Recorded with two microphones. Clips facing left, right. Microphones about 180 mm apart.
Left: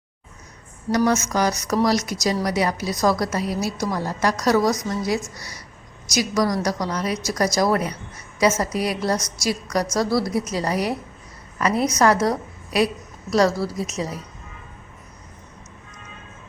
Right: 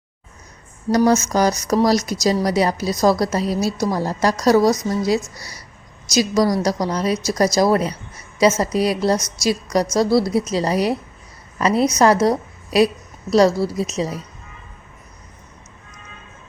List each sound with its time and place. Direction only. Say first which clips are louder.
0.9 s a woman's voice: right 4 dB; 35° right (ahead or behind)